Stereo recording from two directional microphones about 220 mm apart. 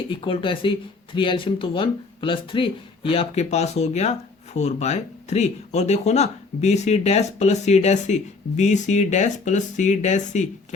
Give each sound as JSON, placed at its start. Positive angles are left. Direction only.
{"t": 0.3, "sound": "speech", "side_deg": 25}